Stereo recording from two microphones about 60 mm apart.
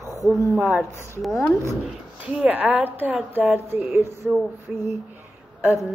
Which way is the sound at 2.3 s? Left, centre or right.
Right.